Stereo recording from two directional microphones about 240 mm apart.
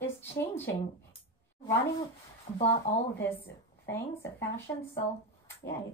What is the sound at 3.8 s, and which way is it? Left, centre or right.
Speech, centre.